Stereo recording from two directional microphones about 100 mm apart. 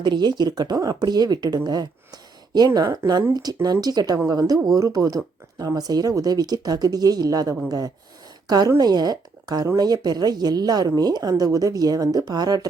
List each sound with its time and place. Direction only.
0.0 s speech: 45° right (ahead or behind)
2.8 s speech: 25° right (ahead or behind)
3.3 s speech: 40° right (ahead or behind)